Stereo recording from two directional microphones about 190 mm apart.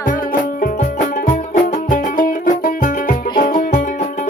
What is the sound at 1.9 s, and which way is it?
Music, 45° left (ahead or behind).